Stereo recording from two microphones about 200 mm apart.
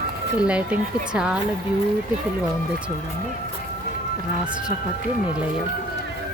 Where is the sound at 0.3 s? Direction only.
5° right (ahead or behind).